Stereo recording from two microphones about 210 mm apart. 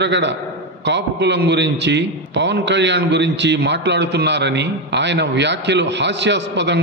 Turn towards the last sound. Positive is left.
turn(degrees=-55)  # may be behind; listen again after turning